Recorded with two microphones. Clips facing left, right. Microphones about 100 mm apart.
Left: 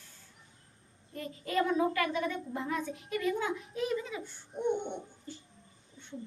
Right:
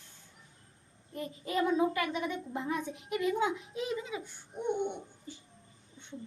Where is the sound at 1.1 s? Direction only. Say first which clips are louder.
Left 1 dB; 20° right (ahead or behind).